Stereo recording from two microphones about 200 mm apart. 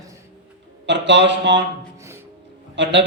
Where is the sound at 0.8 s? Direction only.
60° right (ahead or behind).